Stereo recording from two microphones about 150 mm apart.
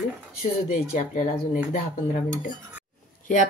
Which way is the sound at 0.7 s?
60° left (ahead or behind).